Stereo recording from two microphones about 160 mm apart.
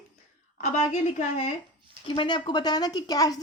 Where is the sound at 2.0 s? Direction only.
30° left (ahead or behind).